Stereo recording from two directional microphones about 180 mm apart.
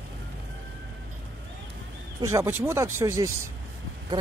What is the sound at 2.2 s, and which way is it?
Speech, 15° right (ahead or behind).